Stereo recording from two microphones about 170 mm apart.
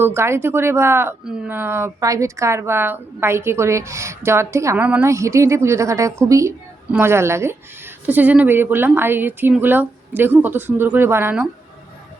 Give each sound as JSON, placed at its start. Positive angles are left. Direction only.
{"t": 0.0, "sound": "speech", "side_deg": -15}